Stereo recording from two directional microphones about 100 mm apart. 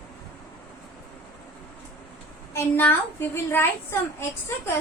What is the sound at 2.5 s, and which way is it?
A child's voice, 20° left (ahead or behind).